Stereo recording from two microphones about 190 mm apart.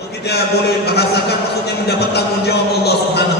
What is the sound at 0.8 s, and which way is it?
Speech, 60° left (ahead or behind).